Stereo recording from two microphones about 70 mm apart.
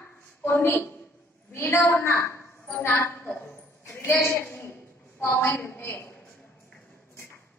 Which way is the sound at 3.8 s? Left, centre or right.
Left.